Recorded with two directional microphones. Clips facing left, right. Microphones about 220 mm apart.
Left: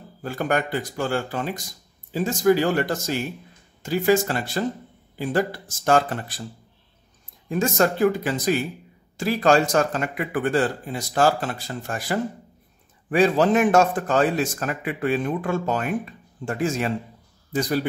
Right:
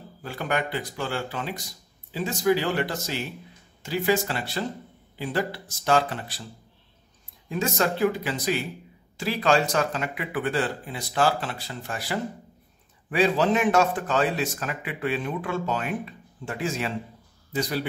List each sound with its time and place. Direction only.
0.2 s a man's voice: 45° left (ahead or behind)
7.4 s a man's voice: 50° left (ahead or behind)